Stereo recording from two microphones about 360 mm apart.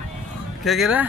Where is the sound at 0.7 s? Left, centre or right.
Centre.